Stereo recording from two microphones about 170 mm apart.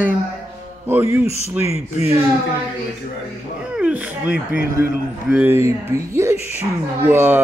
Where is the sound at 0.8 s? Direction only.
15° right (ahead or behind).